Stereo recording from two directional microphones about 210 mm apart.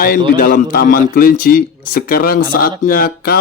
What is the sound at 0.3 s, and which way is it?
A man's voice, 40° left (ahead or behind).